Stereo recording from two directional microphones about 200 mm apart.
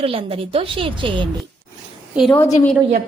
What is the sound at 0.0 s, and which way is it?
A woman's voice, 30° right (ahead or behind).